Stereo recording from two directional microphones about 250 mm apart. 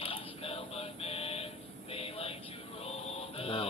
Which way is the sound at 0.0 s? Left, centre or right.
Left.